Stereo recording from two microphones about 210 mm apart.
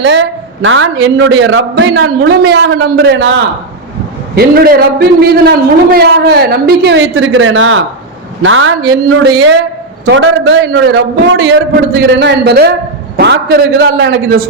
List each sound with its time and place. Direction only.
0.0 s a man's voice: 60° right (ahead or behind)
4.4 s a man's voice: 45° right (ahead or behind); by 8.7 s 70° right (ahead or behind)
9.3 s a man's voice: 55° right (ahead or behind)